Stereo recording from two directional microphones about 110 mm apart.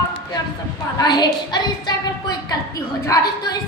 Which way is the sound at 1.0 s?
40° left (ahead or behind).